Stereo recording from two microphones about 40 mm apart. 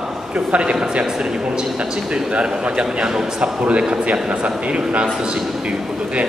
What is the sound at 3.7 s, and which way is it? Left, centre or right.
A man's voice, right.